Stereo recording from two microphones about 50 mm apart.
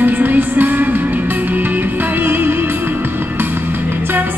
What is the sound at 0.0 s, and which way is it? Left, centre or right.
Music, right.